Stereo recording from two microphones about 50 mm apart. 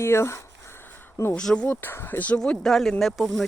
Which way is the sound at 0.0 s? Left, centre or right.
Left.